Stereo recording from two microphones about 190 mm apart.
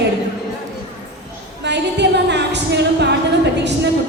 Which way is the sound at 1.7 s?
65° right (ahead or behind).